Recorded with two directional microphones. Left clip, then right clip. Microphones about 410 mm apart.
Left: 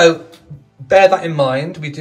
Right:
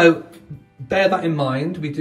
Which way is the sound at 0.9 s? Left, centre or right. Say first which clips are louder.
Left 7 dB; centre.